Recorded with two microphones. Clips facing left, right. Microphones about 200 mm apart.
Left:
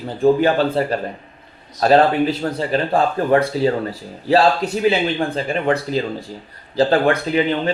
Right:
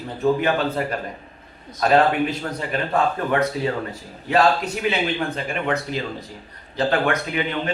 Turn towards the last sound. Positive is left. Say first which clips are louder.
# left 6 dB
turn(degrees=30)  # may be behind; listen again after turning